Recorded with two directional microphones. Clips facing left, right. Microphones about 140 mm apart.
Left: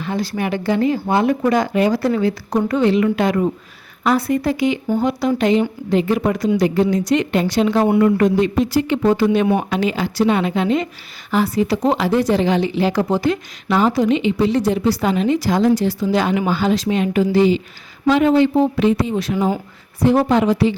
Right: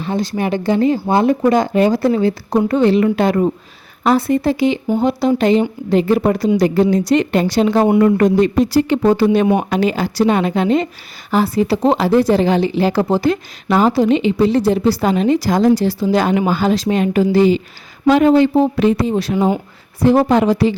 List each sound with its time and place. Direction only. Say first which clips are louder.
0.0 s speech: right 3 dB; 25° right (ahead or behind); by 20.7 s 40° right (ahead or behind)